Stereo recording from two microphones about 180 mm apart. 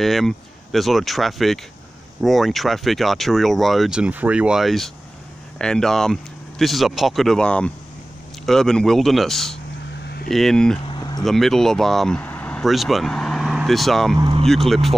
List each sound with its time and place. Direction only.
0.0 s speech: centre (ahead or behind)
10.0 s a sound: 60° left (ahead or behind)
10.3 s speech: centre (ahead or behind)
10.9 s a sound: 25° left (ahead or behind)
11.2 s speech: centre (ahead or behind)
14.1 s speech: 25° right (ahead or behind)
14.4 s speech: centre (ahead or behind)